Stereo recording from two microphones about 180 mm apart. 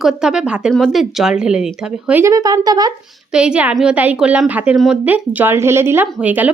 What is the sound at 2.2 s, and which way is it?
Speech, 20° right (ahead or behind).